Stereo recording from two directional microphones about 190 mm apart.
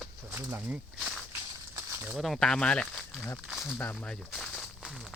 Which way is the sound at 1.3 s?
15° right (ahead or behind).